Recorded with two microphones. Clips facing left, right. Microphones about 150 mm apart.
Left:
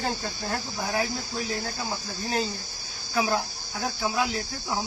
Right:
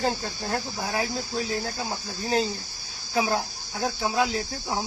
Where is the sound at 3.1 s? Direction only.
30° right (ahead or behind).